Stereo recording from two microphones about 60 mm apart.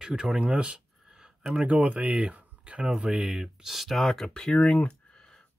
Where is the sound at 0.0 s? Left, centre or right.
Centre.